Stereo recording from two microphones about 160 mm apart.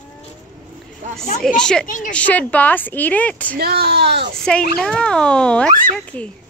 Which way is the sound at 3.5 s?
85° right.